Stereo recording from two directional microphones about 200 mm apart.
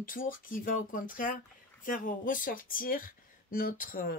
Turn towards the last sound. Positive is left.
turn(degrees=45)  # may be behind; listen again after turning